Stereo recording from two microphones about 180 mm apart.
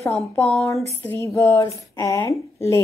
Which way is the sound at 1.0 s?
15° left (ahead or behind).